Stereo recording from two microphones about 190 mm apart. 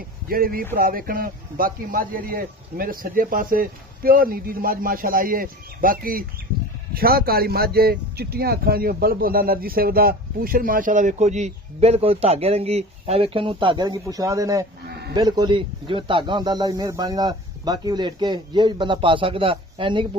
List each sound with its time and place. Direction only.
0.3 s speech: 50° right (ahead or behind); by 20.1 s 25° right (ahead or behind)